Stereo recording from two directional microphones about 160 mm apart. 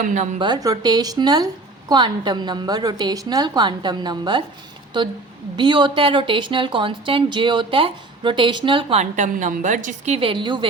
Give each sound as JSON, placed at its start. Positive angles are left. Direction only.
{"t": 0.0, "sound": "speech", "side_deg": -50}
{"t": 0.3, "sound": "a woman's voice", "side_deg": -30}
{"t": 10.2, "sound": "a woman's voice", "side_deg": -30}